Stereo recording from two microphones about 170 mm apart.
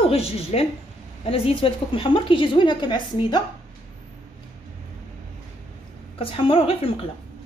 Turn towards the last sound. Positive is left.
turn(degrees=35)  # may be behind; listen again after turning